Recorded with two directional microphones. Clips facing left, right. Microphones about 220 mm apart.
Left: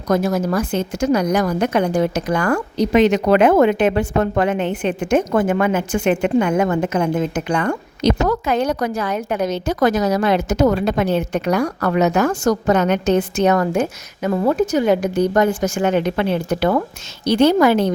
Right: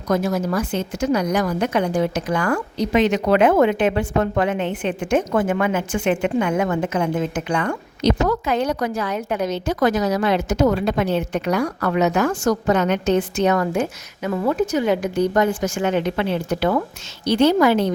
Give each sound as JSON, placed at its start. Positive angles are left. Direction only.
{"t": 0.1, "sound": "speech", "side_deg": 40}